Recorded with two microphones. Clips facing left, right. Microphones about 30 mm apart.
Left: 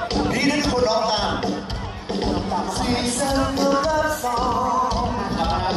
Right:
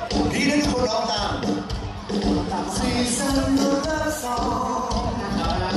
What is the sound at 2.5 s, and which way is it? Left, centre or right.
Music, centre.